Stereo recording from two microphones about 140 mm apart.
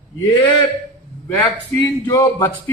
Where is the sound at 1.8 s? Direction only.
25° left (ahead or behind).